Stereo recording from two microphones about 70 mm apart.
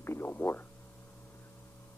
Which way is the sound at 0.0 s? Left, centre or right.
Left.